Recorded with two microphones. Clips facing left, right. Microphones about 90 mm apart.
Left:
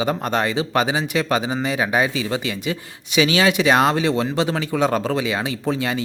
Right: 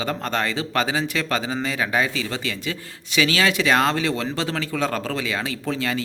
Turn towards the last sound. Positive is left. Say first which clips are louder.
# left 3 dB
turn(degrees=20)  # may be behind; listen again after turning